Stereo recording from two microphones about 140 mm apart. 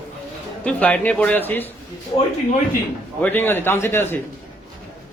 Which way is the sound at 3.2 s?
15° left (ahead or behind).